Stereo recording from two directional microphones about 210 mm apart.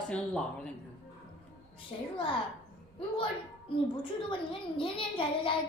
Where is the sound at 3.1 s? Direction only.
25° left (ahead or behind).